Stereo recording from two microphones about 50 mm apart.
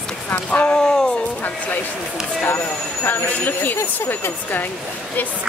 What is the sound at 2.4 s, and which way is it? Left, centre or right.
Speech, left.